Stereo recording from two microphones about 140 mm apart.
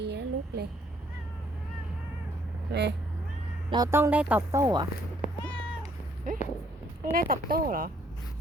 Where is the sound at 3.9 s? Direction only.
15° right (ahead or behind).